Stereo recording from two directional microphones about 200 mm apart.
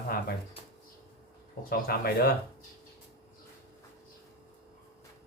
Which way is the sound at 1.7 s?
50° left (ahead or behind).